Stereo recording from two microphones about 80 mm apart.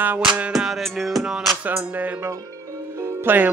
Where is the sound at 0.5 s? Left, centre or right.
Centre.